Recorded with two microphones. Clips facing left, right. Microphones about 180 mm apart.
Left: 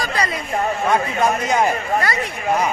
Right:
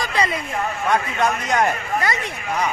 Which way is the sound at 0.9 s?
5° left (ahead or behind).